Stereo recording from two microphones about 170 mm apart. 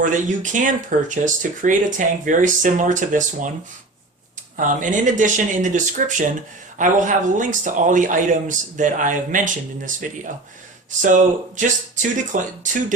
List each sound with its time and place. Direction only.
0.0 s speech: 50° right (ahead or behind)
4.5 s speech: 50° right (ahead or behind)